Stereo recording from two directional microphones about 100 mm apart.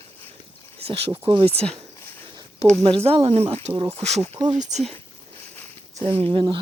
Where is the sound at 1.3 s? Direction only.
70° right (ahead or behind); by 1.8 s 90° right.